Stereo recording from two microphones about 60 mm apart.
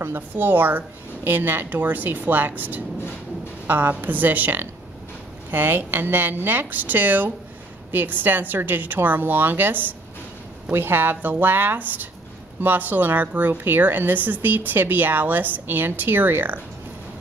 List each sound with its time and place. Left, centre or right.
0.0 s a woman's voice: right